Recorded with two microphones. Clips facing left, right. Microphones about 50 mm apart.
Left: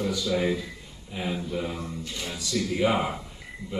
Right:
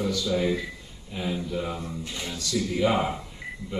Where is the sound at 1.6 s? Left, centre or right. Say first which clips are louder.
Right 1 dB; right.